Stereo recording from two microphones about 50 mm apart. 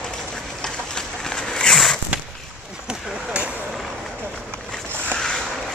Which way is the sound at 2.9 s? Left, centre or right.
Right.